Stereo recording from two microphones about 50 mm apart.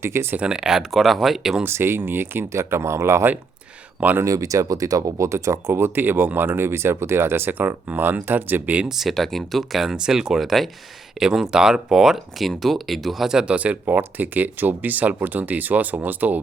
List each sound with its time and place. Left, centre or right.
0.0 s speech: right
0.3 s speech: centre
0.9 s speech: centre
1.6 s speech: right
2.5 s speech: right
4.2 s speech: right
5.1 s speech: right
5.7 s speech: right
8.9 s speech: centre
12.4 s speech: centre
13.3 s speech: right